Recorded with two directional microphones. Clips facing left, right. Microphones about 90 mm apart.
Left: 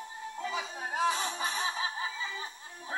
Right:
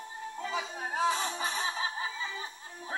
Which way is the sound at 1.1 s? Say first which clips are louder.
Right 1 dB; 25° right (ahead or behind).